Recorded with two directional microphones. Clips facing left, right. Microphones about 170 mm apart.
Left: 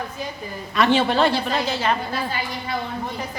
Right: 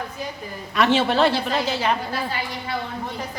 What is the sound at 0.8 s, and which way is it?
A woman's voice, centre (ahead or behind).